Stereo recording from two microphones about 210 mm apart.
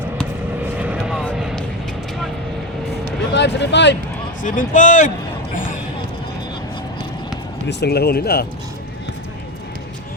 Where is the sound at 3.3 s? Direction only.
55° left (ahead or behind).